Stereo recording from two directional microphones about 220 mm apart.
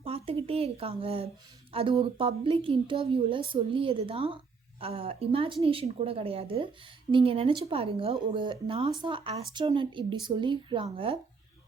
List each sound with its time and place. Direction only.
0.0 s speech: 25° right (ahead or behind)